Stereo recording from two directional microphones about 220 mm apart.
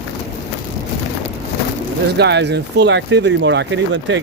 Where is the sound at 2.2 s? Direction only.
50° right (ahead or behind).